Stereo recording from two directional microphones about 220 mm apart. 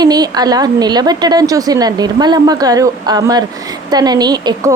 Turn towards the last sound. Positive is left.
turn(degrees=-20)  # may be behind; listen again after turning